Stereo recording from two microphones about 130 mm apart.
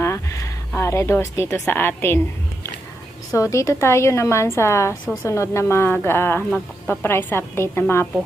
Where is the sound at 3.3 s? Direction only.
25° left (ahead or behind).